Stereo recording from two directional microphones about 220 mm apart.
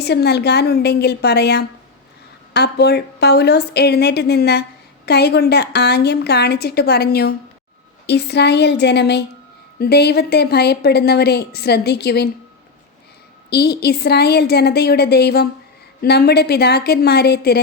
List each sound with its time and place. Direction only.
0.0 s speech: 45° left (ahead or behind)
13.5 s speech: 45° left (ahead or behind)